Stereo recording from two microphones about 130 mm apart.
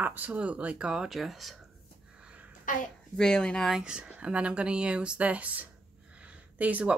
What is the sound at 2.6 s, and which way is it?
Speech, 90° left.